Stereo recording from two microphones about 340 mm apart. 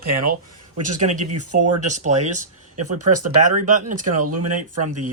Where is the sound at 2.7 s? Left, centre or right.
Right.